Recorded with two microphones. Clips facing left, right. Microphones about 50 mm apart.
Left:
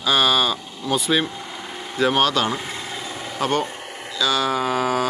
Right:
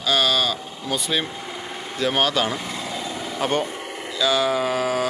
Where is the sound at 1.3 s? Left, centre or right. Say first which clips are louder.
Right 1 dB; centre.